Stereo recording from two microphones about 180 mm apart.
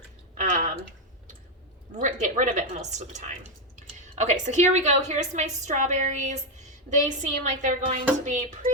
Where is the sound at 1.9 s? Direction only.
40° right (ahead or behind).